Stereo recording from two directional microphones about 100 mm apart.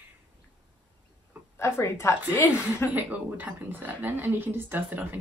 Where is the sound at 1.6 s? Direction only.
25° left (ahead or behind).